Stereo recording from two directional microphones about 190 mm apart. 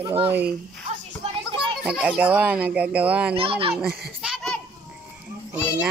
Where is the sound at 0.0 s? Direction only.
25° right (ahead or behind).